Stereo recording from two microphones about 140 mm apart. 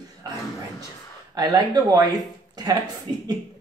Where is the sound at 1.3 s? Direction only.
25° right (ahead or behind).